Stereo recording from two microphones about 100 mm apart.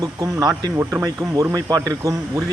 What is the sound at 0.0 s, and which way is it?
Speech, 40° right (ahead or behind).